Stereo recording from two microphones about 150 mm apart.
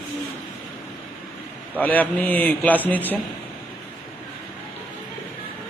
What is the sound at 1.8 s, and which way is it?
A man's voice, 10° left (ahead or behind).